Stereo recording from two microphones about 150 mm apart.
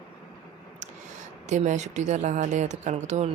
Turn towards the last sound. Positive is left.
turn(degrees=-50)  # may be behind; listen again after turning